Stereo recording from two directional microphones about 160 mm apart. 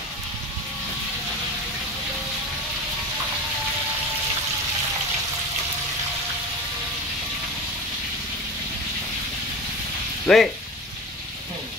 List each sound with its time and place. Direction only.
10.2 s speech: centre (ahead or behind)